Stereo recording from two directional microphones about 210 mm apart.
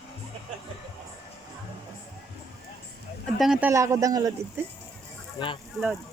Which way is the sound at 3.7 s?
15° right (ahead or behind).